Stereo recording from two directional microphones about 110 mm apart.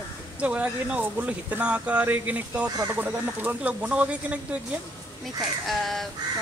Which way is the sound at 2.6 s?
35° right (ahead or behind).